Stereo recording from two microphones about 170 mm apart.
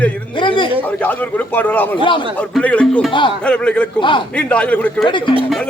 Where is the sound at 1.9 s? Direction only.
30° left (ahead or behind).